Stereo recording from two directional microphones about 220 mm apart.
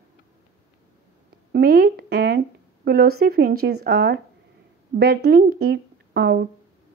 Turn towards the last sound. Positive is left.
turn(degrees=-45)  # may be behind; listen again after turning